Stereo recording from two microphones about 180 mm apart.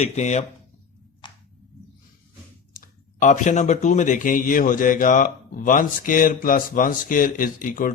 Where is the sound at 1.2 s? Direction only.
25° left (ahead or behind).